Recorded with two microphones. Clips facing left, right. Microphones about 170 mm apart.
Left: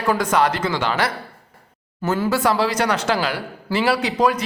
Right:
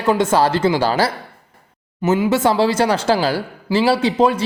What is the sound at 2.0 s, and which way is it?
Speech, 20° right (ahead or behind).